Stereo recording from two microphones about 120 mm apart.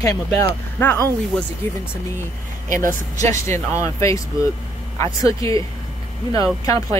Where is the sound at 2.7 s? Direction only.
90° right.